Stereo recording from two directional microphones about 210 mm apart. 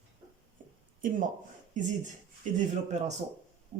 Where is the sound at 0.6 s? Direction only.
40° right (ahead or behind).